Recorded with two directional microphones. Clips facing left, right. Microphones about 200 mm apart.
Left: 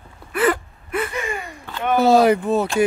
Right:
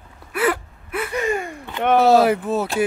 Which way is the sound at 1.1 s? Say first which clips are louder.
Right 5 dB; 40° right (ahead or behind).